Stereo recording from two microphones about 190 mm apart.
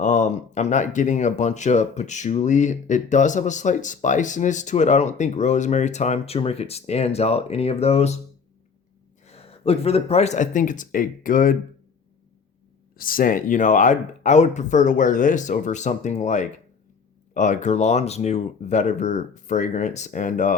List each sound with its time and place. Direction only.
0.0 s speech: 40° left (ahead or behind)
9.2 s speech: 35° left (ahead or behind)
13.0 s speech: 50° left (ahead or behind)